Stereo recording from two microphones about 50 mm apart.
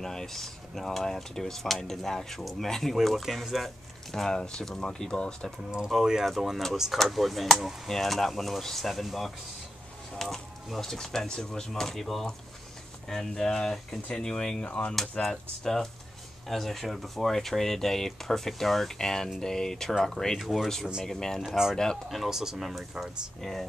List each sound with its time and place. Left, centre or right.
0.0 s speech: centre
4.1 s speech: centre
5.9 s speech: centre
14.6 s speech: left
15.2 s speech: centre
20.3 s speech: centre
22.1 s speech: centre